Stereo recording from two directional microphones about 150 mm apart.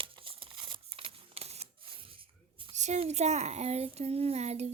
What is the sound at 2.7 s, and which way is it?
A child's voice, 50° right (ahead or behind).